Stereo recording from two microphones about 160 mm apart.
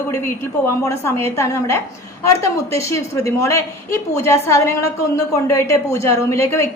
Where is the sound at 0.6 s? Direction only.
15° left (ahead or behind).